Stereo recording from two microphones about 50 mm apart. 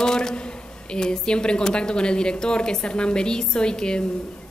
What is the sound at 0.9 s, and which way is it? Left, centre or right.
Speech, centre.